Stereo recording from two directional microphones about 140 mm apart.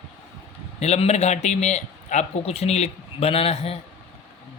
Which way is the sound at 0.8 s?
50° left (ahead or behind).